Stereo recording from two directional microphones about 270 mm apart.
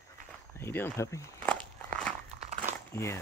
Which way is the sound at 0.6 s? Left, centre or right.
Centre.